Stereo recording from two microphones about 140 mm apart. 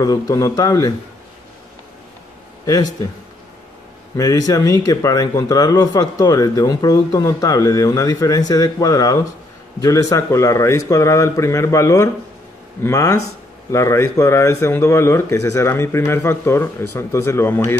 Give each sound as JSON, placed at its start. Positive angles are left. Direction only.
{"t": 0.0, "sound": "speech", "side_deg": 25}
{"t": 2.6, "sound": "a man's voice", "side_deg": 25}
{"t": 4.2, "sound": "speech", "side_deg": 25}